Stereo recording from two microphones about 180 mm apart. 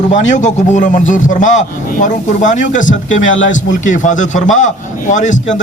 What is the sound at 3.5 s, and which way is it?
A man's voice, 45° left (ahead or behind).